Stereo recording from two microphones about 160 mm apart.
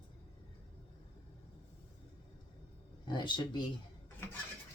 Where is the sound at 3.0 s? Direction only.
30° left (ahead or behind).